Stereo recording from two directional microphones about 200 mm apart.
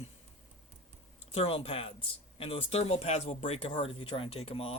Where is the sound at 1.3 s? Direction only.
30° left (ahead or behind).